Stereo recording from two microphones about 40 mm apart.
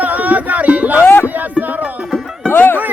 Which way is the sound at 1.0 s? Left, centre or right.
Left.